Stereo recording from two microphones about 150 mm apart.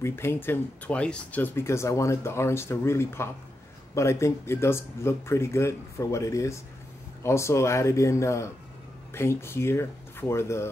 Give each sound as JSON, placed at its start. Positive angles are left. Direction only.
{"t": 0.0, "sound": "speech", "side_deg": 15}